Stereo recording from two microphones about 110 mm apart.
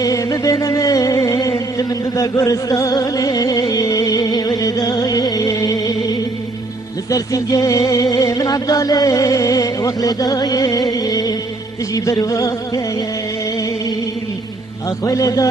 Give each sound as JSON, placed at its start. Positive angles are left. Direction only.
{"t": 0.0, "sound": "a sound", "side_deg": 30}
{"t": 7.1, "sound": "music", "side_deg": 30}
{"t": 14.8, "sound": "music", "side_deg": 30}